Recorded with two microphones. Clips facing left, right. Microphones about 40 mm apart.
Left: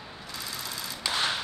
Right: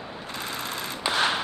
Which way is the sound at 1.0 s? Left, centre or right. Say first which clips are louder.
Right 5 dB; right.